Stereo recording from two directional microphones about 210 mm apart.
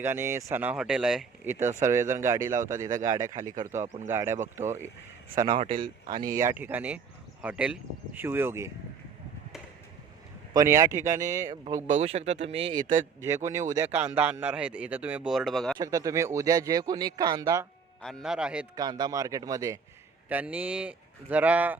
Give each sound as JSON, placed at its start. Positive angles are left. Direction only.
{"t": 0.0, "sound": "speech", "side_deg": -10}
{"t": 5.3, "sound": "a man's voice", "side_deg": -20}
{"t": 6.3, "sound": "speech", "side_deg": -10}
{"t": 10.5, "sound": "speech", "side_deg": -15}
{"t": 11.9, "sound": "speech", "side_deg": -30}
{"t": 13.2, "sound": "speech", "side_deg": -15}
{"t": 15.8, "sound": "speech", "side_deg": -15}
{"t": 18.0, "sound": "speech", "side_deg": 0}
{"t": 18.8, "sound": "speech", "side_deg": -20}